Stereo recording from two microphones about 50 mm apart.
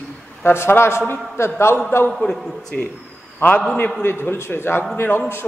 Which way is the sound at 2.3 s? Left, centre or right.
Centre.